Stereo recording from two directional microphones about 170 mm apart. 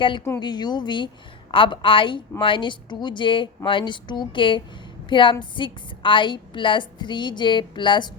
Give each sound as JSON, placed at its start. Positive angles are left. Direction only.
{"t": 0.3, "sound": "a woman's voice", "side_deg": 25}